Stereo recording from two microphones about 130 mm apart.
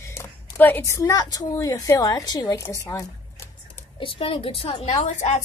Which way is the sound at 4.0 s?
45° left (ahead or behind).